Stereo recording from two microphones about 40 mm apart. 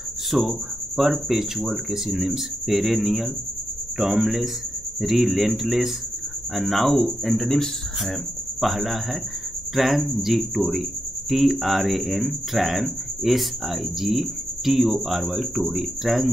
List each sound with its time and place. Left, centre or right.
0.3 s speech: centre
4.0 s speech: centre
5.0 s a man's voice: centre
8.5 s speech: centre